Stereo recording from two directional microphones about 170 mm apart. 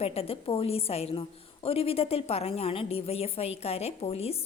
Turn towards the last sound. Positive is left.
turn(degrees=35)  # may be behind; listen again after turning